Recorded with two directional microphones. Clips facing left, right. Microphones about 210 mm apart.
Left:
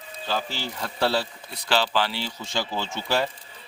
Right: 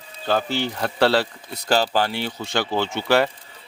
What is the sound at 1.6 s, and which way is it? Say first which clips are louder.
Speech: right 4 dB; 45° right (ahead or behind).